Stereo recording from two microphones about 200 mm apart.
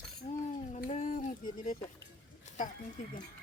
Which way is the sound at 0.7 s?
35° left (ahead or behind).